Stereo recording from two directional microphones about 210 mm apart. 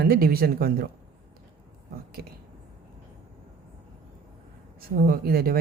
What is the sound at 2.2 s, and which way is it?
Speech, 45° right (ahead or behind).